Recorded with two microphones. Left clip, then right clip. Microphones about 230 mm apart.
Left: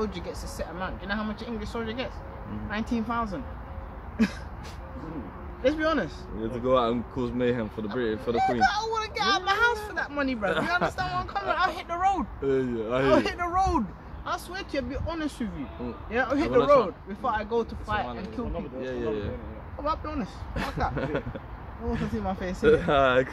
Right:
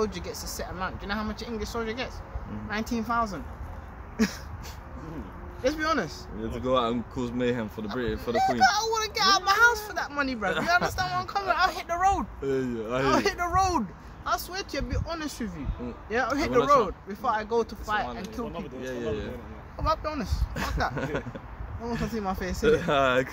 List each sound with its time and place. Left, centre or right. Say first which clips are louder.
0.0 s speech: right 2 dB; right
5.6 s speech: left 1 dB; right
6.5 s speech: left 2 dB; centre
8.3 s speech: right 2 dB; right
12.4 s speech: left 2 dB; centre
13.1 s speech: even; right
18.8 s speech: left 2 dB; centre
19.8 s speech: right 2 dB; right
20.5 s speech: even; centre
22.0 s speech: right 2 dB; right
22.6 s speech: left 2 dB; centre